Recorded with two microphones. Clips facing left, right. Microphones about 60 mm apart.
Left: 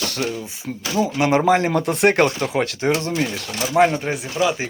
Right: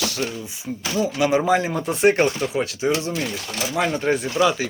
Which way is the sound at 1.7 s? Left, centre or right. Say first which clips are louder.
Left 1 dB; left.